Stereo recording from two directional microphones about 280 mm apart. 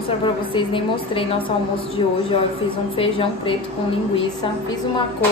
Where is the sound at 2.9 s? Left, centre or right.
Centre.